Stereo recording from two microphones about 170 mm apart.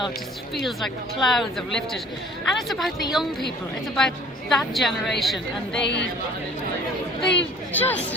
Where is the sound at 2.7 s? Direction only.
Centre (ahead or behind).